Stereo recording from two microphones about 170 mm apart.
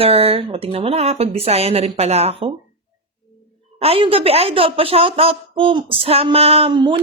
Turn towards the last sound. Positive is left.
turn(degrees=-30)  # may be behind; listen again after turning